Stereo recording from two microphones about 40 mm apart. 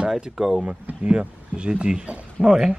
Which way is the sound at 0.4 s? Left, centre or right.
Centre.